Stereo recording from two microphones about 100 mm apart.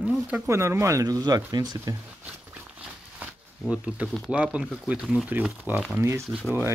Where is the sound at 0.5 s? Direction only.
25° right (ahead or behind).